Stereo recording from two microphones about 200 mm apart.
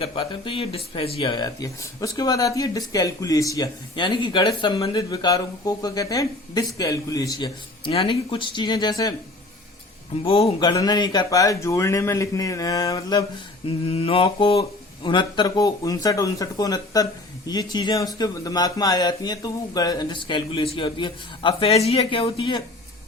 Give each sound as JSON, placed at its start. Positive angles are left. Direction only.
{"t": 0.0, "sound": "speech", "side_deg": 25}
{"t": 10.2, "sound": "speech", "side_deg": 30}
{"t": 10.6, "sound": "speech", "side_deg": 20}
{"t": 13.7, "sound": "speech", "side_deg": 25}